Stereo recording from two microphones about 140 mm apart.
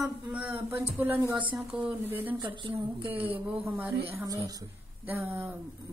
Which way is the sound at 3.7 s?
15° right (ahead or behind).